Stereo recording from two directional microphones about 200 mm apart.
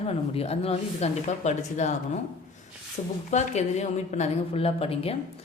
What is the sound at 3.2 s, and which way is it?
Speech, 35° left (ahead or behind).